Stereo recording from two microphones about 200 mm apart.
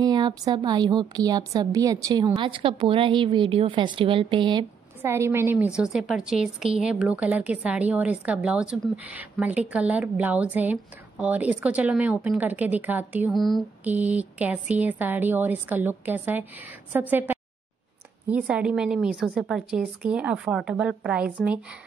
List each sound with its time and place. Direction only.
0.0 s a woman's voice: 20° right (ahead or behind)
5.0 s a woman's voice: 15° right (ahead or behind)